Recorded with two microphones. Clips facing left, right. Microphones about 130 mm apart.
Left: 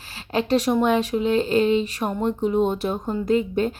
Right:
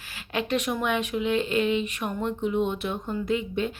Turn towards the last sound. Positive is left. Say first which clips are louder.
# left 6 dB
turn(degrees=40)  # may be behind; listen again after turning